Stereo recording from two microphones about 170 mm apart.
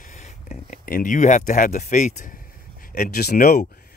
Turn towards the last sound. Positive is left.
turn(degrees=60)  # may be behind; listen again after turning